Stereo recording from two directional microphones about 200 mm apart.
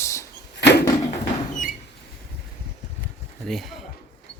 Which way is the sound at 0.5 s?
60° left (ahead or behind).